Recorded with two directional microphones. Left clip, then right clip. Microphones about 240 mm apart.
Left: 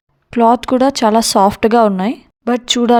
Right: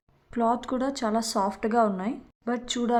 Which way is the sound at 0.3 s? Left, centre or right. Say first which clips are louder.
Left 15 dB; left.